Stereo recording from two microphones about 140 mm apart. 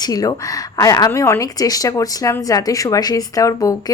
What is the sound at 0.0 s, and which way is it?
A woman's voice, 25° left (ahead or behind).